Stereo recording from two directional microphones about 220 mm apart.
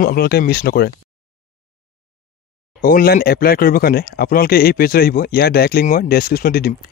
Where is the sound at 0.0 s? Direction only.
45° left (ahead or behind).